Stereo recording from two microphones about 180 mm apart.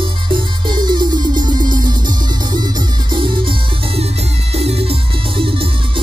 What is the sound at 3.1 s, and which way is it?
Music, 30° right (ahead or behind).